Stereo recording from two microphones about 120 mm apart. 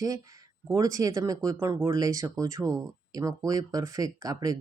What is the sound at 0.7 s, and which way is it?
Speech, 30° right (ahead or behind).